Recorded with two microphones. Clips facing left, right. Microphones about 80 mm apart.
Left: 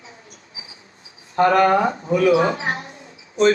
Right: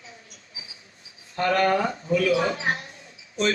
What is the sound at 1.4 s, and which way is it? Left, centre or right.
A man's voice, left.